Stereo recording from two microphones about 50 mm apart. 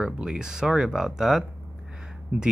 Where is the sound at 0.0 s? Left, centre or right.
Centre.